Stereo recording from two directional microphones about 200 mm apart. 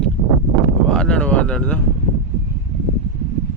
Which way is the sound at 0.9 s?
5° left (ahead or behind).